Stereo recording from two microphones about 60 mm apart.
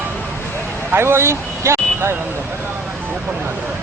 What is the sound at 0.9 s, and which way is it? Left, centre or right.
Vehicle, right.